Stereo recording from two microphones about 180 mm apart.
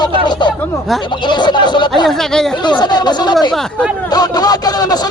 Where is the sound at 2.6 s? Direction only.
25° left (ahead or behind).